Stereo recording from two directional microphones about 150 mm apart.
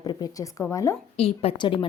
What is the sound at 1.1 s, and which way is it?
Speech, 40° left (ahead or behind).